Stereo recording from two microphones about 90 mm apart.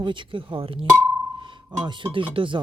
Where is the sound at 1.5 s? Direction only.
65° right (ahead or behind).